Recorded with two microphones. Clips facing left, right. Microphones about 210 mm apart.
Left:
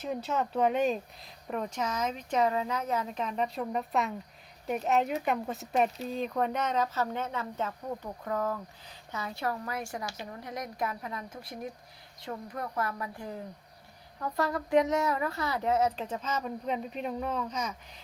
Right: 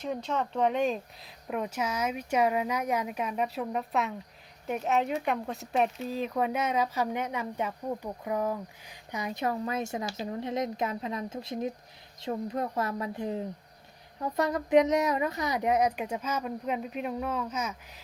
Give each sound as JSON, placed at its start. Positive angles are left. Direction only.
{"t": 0.0, "sound": "speech", "side_deg": 5}